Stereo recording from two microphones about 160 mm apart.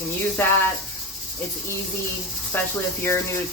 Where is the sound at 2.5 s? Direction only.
15° left (ahead or behind).